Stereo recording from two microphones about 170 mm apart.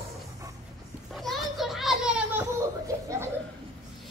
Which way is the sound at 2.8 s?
20° right (ahead or behind).